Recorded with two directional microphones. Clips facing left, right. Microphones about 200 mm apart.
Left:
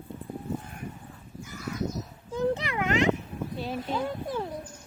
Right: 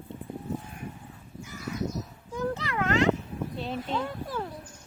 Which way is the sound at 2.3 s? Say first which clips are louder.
Left 4 dB; 20° left (ahead or behind).